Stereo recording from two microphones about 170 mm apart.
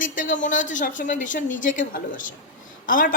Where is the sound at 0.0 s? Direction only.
50° left (ahead or behind).